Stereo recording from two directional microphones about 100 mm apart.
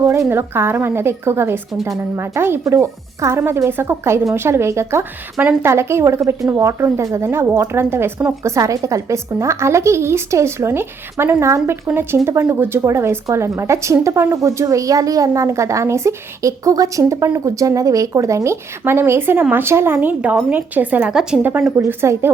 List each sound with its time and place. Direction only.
0.0 s a woman's voice: 30° right (ahead or behind)
21.1 s a woman's voice: 5° right (ahead or behind)
21.8 s a woman's voice: 30° right (ahead or behind)